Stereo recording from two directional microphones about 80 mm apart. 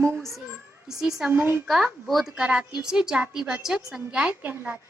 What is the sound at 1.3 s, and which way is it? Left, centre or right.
Speech, right.